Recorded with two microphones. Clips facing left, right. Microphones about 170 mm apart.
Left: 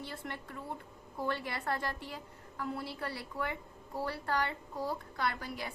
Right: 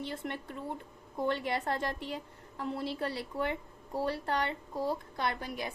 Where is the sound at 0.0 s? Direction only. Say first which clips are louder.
Right 5 dB; 20° right (ahead or behind).